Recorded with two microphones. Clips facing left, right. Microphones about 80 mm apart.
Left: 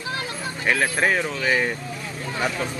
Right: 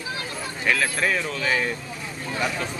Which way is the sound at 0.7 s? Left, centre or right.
Left.